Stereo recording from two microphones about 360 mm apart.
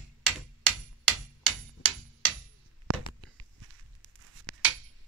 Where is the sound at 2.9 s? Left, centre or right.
Right.